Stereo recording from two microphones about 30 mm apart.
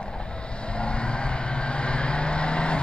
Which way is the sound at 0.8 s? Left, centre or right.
Left.